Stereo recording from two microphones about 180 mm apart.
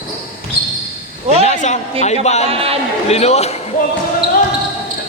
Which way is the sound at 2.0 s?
40° left (ahead or behind).